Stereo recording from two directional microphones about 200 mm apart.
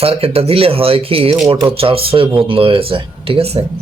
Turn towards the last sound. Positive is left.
turn(degrees=-30)  # may be behind; listen again after turning